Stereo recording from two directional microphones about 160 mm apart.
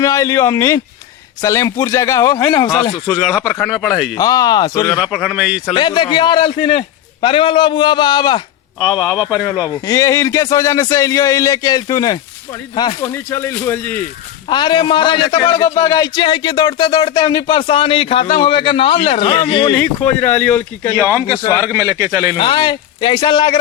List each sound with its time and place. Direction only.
0.0 s speech: 20° left (ahead or behind)
3.2 s speech: 5° right (ahead or behind)
4.2 s speech: 25° left (ahead or behind)
5.1 s speech: 5° right (ahead or behind)
5.7 s speech: 30° left (ahead or behind)
13.0 s speech: 15° left (ahead or behind)
14.5 s speech: 30° left (ahead or behind)
19.8 s speech: 10° left (ahead or behind)
21.6 s a man's voice: 15° right (ahead or behind)
22.4 s speech: 30° left (ahead or behind)